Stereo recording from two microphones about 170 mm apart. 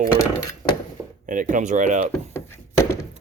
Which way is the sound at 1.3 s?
50° right (ahead or behind).